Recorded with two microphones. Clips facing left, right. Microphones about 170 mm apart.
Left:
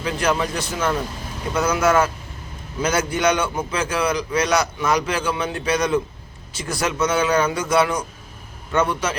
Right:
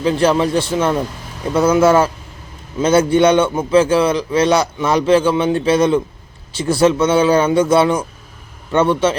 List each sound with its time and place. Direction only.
0.0 s a man's voice: 30° right (ahead or behind)